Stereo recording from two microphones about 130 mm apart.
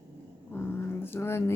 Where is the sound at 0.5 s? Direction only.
15° left (ahead or behind).